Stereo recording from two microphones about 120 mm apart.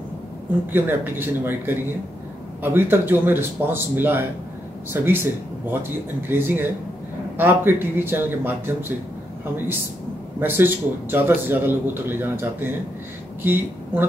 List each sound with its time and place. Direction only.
0.7 s a man's voice: 15° right (ahead or behind)
10.4 s a man's voice: 15° right (ahead or behind)